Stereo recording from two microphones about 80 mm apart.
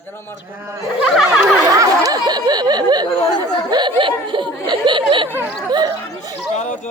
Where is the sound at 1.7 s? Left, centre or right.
Right.